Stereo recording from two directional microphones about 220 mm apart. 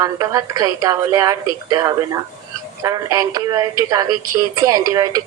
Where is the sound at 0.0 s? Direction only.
15° right (ahead or behind).